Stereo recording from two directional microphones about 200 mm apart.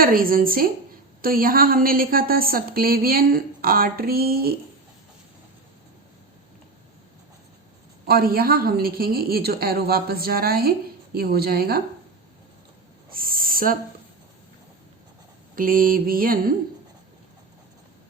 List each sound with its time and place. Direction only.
0.0 s speech: 45° right (ahead or behind)
8.0 s speech: 50° right (ahead or behind)
13.1 s owl: 45° right (ahead or behind)
15.5 s speech: 45° right (ahead or behind)